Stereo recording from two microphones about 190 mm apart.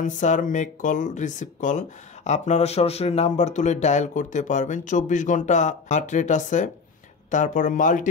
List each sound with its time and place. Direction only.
0.0 s speech: 40° left (ahead or behind)